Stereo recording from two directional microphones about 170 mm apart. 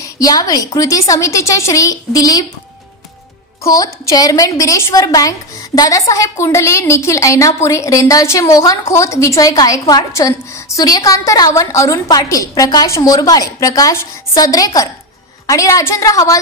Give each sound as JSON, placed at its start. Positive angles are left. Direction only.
{"t": 0.0, "sound": "a woman's voice", "side_deg": 20}
{"t": 3.6, "sound": "a woman's voice", "side_deg": 20}